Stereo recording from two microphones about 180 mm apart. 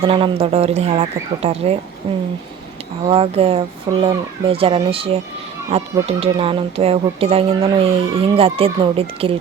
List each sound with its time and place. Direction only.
0.0 s speech: 30° right (ahead or behind)